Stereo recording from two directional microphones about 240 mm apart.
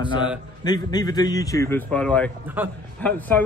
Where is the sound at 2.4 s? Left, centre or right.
Centre.